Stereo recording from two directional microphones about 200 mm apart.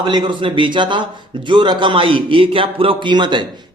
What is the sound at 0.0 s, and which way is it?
A man's voice, 25° right (ahead or behind).